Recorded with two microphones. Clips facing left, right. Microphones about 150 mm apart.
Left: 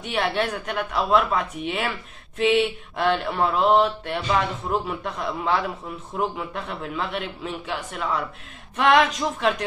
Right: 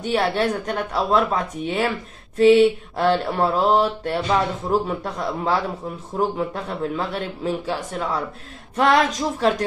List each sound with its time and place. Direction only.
0.0 s a man's voice: 35° right (ahead or behind)